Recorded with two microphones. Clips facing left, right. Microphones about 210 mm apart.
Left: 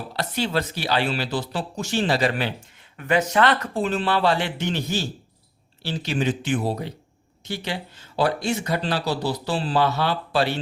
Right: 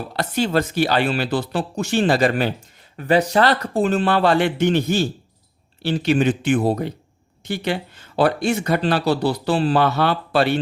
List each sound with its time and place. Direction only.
0.2 s speech: 50° right (ahead or behind)
3.0 s speech: 35° right (ahead or behind); by 10.6 s 60° right (ahead or behind)